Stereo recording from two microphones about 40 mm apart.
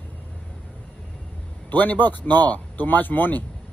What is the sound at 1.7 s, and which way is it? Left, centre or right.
Speech, left.